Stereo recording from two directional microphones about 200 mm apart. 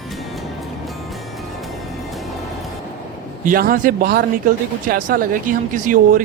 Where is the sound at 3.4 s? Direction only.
45° right (ahead or behind).